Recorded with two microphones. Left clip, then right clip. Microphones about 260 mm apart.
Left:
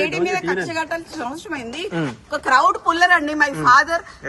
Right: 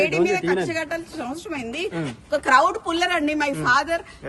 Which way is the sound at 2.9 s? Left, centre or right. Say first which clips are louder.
Left 6 dB; centre.